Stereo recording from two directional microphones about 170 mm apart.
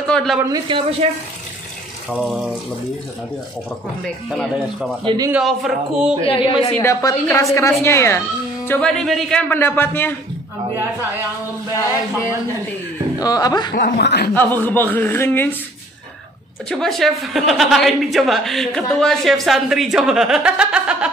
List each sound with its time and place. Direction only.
0.0 s a sound: 5° left (ahead or behind)
0.7 s a man's voice: 30° right (ahead or behind)
2.0 s a woman's voice: centre (ahead or behind)
4.0 s a woman's voice: centre (ahead or behind)
5.0 s a man's voice: 25° right (ahead or behind)
5.3 s a woman's voice: centre (ahead or behind)
6.2 s a woman's voice: 35° left (ahead or behind)
6.8 s a man's voice: 20° left (ahead or behind)
13.2 s speech: 20° left (ahead or behind)
13.7 s speech: 65° left (ahead or behind)
14.3 s a man's voice: 10° left (ahead or behind)
16.6 s a woman's voice: centre (ahead or behind)